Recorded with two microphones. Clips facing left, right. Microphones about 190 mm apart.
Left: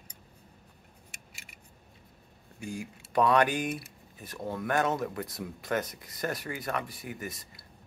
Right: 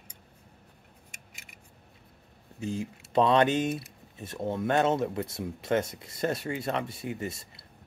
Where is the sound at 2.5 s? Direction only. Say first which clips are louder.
Right 5 dB; 25° right (ahead or behind).